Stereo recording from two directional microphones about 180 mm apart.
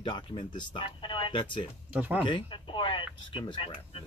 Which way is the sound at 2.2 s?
25° left (ahead or behind).